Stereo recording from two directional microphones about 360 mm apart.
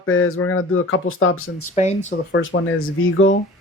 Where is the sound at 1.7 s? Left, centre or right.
Centre.